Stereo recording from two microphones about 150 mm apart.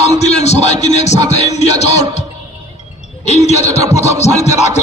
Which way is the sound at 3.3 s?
45° left (ahead or behind).